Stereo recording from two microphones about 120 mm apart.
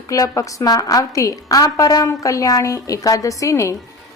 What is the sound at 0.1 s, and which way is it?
A woman's voice, 25° left (ahead or behind).